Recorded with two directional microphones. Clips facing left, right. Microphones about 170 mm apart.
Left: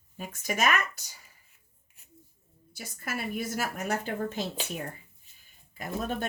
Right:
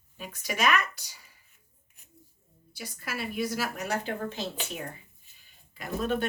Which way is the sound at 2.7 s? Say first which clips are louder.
Left 1 dB; 50° left (ahead or behind).